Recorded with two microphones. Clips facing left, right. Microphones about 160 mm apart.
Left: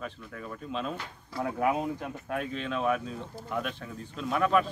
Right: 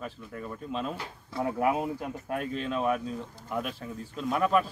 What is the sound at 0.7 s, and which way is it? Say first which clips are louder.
Speech: even; centre (ahead or behind).